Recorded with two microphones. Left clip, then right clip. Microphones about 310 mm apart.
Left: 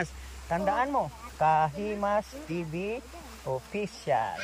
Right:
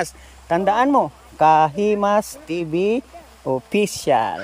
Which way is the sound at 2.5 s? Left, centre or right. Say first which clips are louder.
Right 11 dB; right.